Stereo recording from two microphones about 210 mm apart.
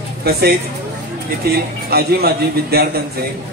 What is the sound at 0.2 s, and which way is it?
A man's voice, 50° right (ahead or behind).